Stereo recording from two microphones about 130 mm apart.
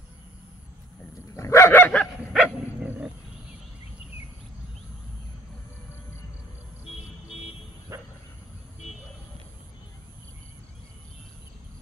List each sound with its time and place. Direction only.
1.3 s dog: 20° left (ahead or behind)
2.3 s dog: 10° right (ahead or behind)
7.9 s bow-wow: 25° right (ahead or behind)